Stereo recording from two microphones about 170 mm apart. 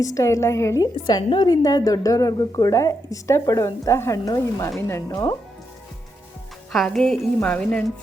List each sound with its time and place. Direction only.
0.0 s a woman's voice: 20° left (ahead or behind)
6.7 s music: centre (ahead or behind)
7.4 s speech: 5° left (ahead or behind)